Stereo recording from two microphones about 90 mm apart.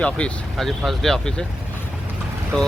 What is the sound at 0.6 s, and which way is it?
Speech, centre (ahead or behind).